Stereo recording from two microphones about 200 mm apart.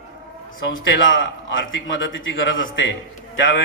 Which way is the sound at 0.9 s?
70° left (ahead or behind).